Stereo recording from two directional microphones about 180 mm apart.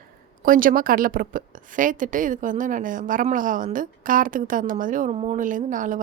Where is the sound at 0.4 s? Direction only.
50° right (ahead or behind).